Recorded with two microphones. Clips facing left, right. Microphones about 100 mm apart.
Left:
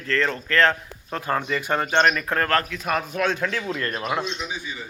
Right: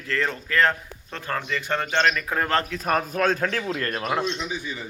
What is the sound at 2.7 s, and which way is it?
Speech, 40° right (ahead or behind).